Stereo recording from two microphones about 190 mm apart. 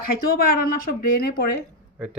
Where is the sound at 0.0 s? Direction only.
50° left (ahead or behind).